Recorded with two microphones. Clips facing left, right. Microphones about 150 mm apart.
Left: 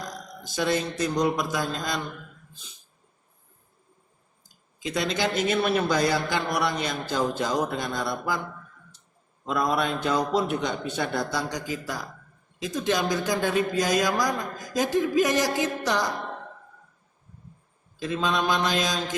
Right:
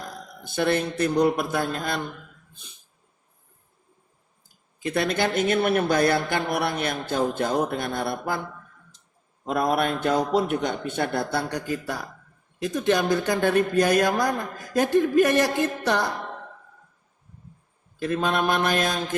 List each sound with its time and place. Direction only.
0.0 s a man's voice: 60° right (ahead or behind)
4.4 s speech: 60° right (ahead or behind)
9.5 s speech: 55° right (ahead or behind)
18.0 s speech: 60° right (ahead or behind)